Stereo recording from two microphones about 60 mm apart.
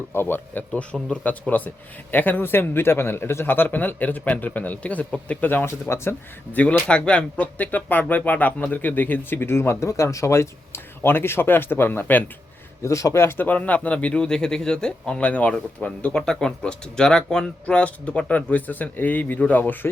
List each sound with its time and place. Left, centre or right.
0.1 s speech: left
5.8 s speech: left
6.5 s speech: left
12.8 s speech: left